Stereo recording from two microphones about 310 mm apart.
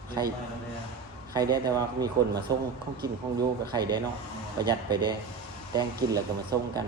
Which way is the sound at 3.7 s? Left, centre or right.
Centre.